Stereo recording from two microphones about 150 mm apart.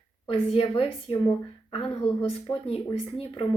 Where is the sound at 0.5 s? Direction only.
40° left (ahead or behind).